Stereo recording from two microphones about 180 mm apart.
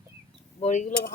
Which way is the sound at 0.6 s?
40° left (ahead or behind).